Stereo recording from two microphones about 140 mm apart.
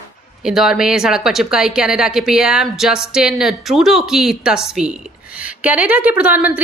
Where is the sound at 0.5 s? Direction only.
5° right (ahead or behind).